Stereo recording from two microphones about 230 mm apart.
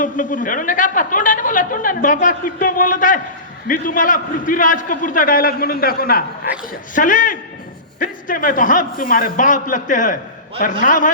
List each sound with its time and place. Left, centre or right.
0.0 s speech: left